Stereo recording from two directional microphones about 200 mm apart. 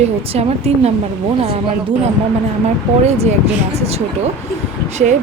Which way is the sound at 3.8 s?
30° right (ahead or behind).